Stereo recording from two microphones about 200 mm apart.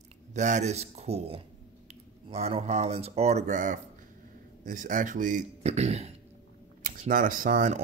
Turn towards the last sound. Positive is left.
turn(degrees=-40)  # may be behind; listen again after turning